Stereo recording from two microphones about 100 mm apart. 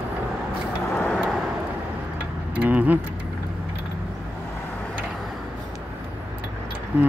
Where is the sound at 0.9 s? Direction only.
10° left (ahead or behind).